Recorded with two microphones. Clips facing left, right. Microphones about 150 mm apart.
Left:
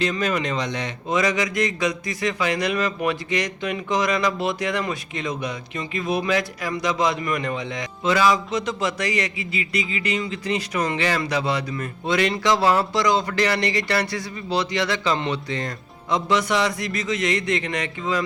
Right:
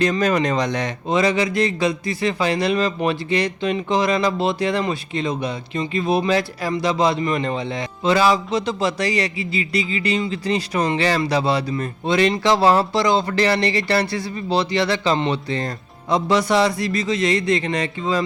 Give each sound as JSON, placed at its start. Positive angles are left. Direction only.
{"t": 0.0, "sound": "speech", "side_deg": -40}
{"t": 1.0, "sound": "speech", "side_deg": -30}